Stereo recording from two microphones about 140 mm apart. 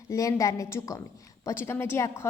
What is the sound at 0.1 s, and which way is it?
A woman's voice, 25° left (ahead or behind).